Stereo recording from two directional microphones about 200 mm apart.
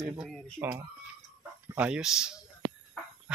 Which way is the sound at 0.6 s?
15° right (ahead or behind).